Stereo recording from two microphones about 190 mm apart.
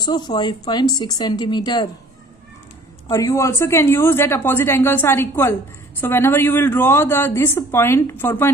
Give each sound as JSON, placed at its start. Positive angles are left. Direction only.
{"t": 0.0, "sound": "speech", "side_deg": 20}
{"t": 3.1, "sound": "a woman's voice", "side_deg": 15}